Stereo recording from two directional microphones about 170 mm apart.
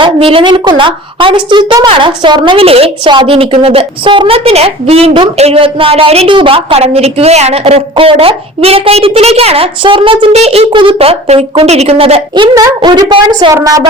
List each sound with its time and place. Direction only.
0.0 s a woman's voice: 30° right (ahead or behind)